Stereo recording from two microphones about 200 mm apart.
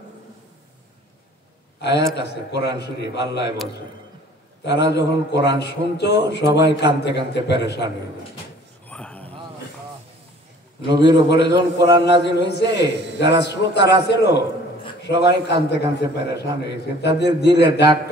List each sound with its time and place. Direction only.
1.8 s a man's voice: 60° left (ahead or behind)
4.6 s speech: 60° left (ahead or behind)
8.8 s a sound: 5° left (ahead or behind)
10.9 s speech: 60° left (ahead or behind)
12.9 s a man's voice: 60° right (ahead or behind)
13.4 s speech: 60° left (ahead or behind)